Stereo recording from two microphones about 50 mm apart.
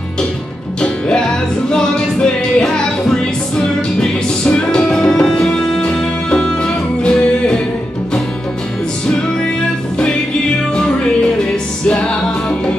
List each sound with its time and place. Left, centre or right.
0.7 s music: centre
4.5 s music: centre
11.9 s music: left